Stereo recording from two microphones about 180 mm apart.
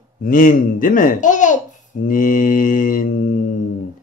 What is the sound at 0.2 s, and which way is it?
Speech, 50° left (ahead or behind).